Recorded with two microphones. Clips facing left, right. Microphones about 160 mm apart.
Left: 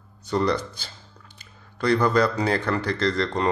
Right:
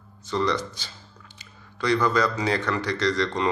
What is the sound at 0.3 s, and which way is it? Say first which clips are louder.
Speech: left 2 dB; 45° left (ahead or behind).